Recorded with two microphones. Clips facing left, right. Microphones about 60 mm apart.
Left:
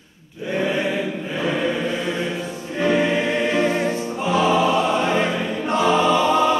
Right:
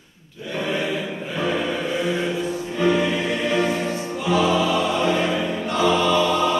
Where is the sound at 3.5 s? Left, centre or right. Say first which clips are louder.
Left 2 dB; left.